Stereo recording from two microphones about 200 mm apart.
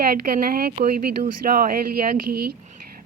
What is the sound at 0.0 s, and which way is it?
Speech, 45° right (ahead or behind).